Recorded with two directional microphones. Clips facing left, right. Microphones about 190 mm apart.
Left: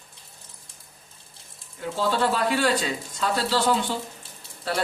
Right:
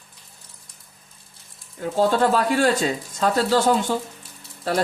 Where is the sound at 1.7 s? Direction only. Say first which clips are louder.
Right 5 dB; 45° right (ahead or behind).